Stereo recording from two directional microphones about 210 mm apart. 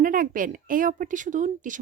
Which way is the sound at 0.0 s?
40° right (ahead or behind).